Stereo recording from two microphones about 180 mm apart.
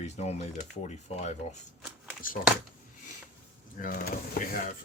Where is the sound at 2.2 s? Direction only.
50° left (ahead or behind).